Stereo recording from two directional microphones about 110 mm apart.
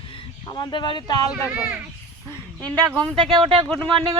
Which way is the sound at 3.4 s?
55° right (ahead or behind).